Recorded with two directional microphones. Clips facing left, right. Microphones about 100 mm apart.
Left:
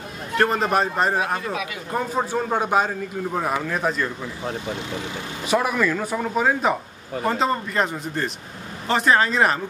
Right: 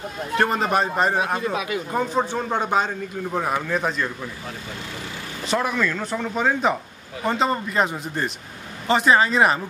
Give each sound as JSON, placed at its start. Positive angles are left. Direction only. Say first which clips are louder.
{"t": 0.4, "sound": "a man's voice", "louder": "left 1 dB", "side_deg": 0}
{"t": 1.2, "sound": "speech", "louder": "right 1 dB", "side_deg": -20}
{"t": 1.9, "sound": "a man's voice", "louder": "left 1 dB", "side_deg": 0}
{"t": 5.5, "sound": "a man's voice", "louder": "left 2 dB", "side_deg": 5}